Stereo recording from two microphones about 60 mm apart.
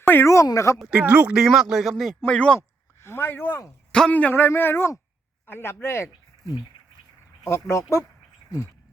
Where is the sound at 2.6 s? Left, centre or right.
Left.